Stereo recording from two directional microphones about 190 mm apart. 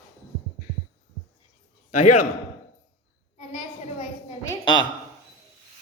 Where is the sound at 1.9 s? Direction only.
40° left (ahead or behind).